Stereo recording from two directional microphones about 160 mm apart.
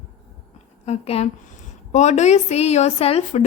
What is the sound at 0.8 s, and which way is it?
Speech, 40° left (ahead or behind).